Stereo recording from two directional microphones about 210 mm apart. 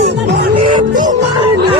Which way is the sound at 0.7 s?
40° right (ahead or behind).